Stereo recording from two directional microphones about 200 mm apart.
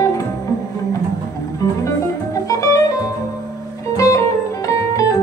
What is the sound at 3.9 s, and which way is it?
Music, 15° left (ahead or behind).